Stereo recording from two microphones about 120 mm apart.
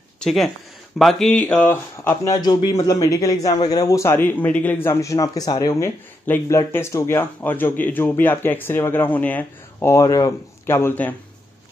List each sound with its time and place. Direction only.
0.2 s speech: centre (ahead or behind)
4.8 s speech: 25° left (ahead or behind)
6.2 s speech: 15° left (ahead or behind)
10.8 s speech: 15° left (ahead or behind)